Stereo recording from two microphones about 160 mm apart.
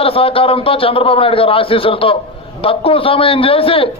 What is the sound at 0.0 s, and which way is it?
A man's voice, 35° left (ahead or behind).